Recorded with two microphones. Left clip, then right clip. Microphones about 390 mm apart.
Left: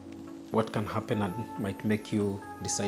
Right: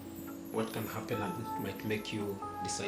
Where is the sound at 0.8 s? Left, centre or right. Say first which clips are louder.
Left 5 dB; left.